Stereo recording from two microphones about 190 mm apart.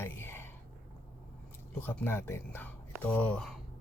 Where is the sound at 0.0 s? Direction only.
10° left (ahead or behind).